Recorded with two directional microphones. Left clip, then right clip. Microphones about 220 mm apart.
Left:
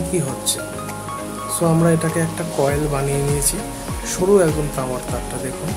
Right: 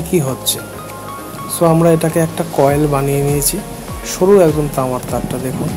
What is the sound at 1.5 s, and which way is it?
Speech, 15° right (ahead or behind).